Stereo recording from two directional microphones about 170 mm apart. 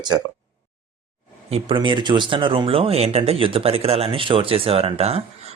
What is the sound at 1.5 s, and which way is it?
Speech, 35° right (ahead or behind).